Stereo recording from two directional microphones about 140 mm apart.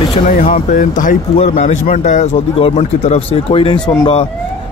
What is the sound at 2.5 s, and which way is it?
Speech, 45° left (ahead or behind).